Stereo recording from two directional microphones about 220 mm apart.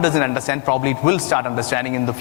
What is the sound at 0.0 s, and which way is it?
A man's voice, 15° left (ahead or behind).